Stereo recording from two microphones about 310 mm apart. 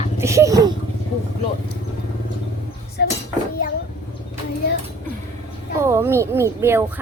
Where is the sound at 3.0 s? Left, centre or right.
Left.